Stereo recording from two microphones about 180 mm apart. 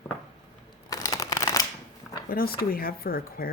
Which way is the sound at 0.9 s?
20° left (ahead or behind).